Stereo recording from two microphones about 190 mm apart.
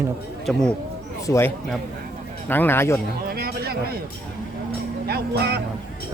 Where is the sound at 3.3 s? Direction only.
55° right (ahead or behind).